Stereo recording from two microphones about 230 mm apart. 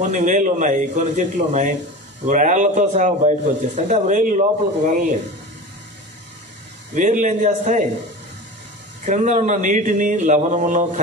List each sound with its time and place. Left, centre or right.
0.0 s a man's voice: right
7.0 s a man's voice: right
9.0 s a man's voice: right